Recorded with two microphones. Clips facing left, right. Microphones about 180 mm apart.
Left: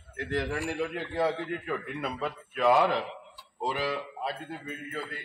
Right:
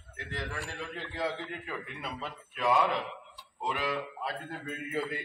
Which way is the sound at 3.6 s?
35° left (ahead or behind).